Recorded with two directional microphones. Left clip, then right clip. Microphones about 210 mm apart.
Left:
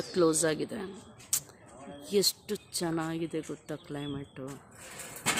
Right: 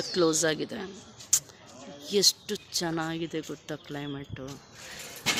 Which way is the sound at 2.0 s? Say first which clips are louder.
Right 4 dB; 5° left (ahead or behind).